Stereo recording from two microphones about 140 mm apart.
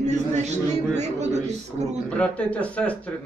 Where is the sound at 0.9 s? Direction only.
55° right (ahead or behind).